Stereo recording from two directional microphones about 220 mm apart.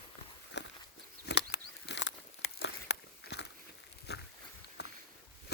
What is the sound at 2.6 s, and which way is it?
Biting, 50° left (ahead or behind).